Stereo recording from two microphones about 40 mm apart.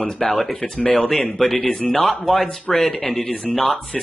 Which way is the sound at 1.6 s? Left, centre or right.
Centre.